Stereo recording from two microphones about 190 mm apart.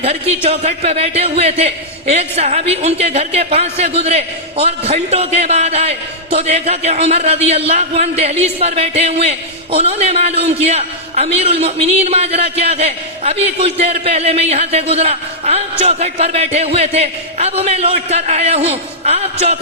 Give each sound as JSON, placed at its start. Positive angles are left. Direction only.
{"t": 0.0, "sound": "speech", "side_deg": -30}